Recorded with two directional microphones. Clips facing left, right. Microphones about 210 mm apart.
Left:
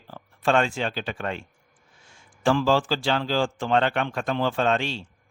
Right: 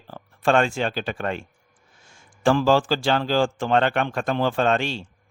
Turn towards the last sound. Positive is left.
turn(degrees=-45)  # may be behind; listen again after turning